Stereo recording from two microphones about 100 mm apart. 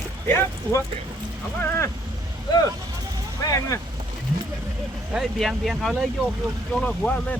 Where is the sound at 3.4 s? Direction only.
35° left (ahead or behind).